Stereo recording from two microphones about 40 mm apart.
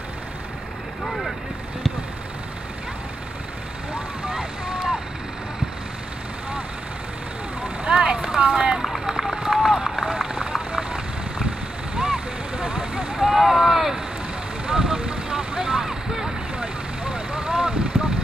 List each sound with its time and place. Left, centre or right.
1.0 s vehicle: centre
4.3 s vehicle: centre
7.9 s vehicle: centre
8.4 s boat: right
9.0 s run: centre
10.7 s vehicle: centre
13.2 s boat: centre
14.7 s boat: centre
16.5 s vehicle: right